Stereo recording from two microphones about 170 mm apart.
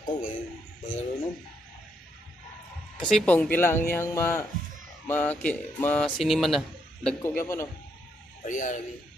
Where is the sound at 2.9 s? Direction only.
5° left (ahead or behind).